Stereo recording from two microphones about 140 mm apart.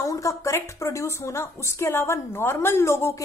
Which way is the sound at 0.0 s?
20° left (ahead or behind).